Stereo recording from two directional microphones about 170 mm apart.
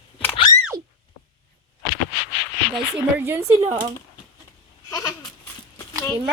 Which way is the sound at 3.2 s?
15° right (ahead or behind).